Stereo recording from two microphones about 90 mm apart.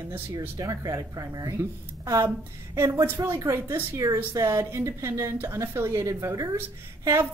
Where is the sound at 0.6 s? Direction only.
40° right (ahead or behind).